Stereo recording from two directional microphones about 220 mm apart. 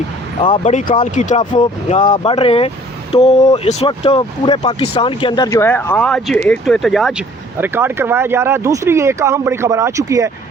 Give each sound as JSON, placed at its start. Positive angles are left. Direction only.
{"t": 0.4, "sound": "speech", "side_deg": 25}